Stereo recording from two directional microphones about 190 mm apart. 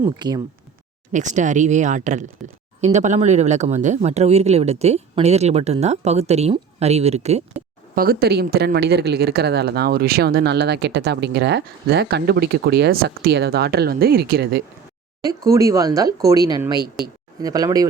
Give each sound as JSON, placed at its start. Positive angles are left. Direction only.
{"t": 0.2, "sound": "speech", "side_deg": -20}
{"t": 1.1, "sound": "speech", "side_deg": -40}
{"t": 7.9, "sound": "speech", "side_deg": -50}
{"t": 15.2, "sound": "speech", "side_deg": -20}
{"t": 17.0, "sound": "speech", "side_deg": 0}
{"t": 17.4, "sound": "speech", "side_deg": -20}